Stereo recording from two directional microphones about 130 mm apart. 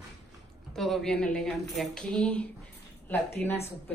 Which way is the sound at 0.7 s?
Centre (ahead or behind).